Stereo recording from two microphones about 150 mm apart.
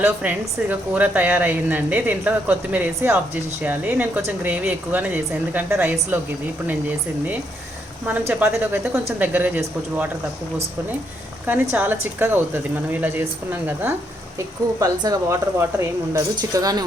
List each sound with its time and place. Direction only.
0.0 s a woman's voice: 10° right (ahead or behind)
8.3 s a woman's voice: 10° right (ahead or behind)
11.4 s a woman's voice: 10° right (ahead or behind)